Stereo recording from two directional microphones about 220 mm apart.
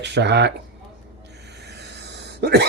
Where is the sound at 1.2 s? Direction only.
50° right (ahead or behind).